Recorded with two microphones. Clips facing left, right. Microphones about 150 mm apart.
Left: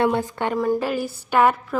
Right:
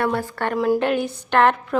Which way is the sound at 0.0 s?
20° left (ahead or behind).